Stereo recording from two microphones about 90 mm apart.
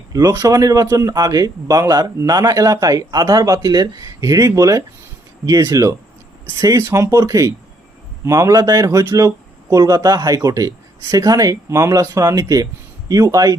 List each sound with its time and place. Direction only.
0.1 s speech: 40° right (ahead or behind)